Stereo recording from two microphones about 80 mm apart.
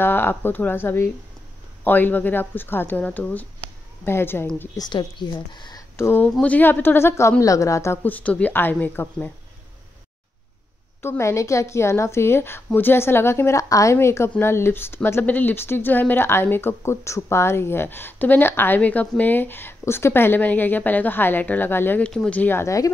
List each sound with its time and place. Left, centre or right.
0.0 s speech: left
4.7 s speech: left
5.9 s speech: left
6.4 s a woman's voice: left
8.0 s speech: centre
11.0 s a woman's voice: left
22.0 s speech: centre
22.4 s speech: left
22.7 s speech: left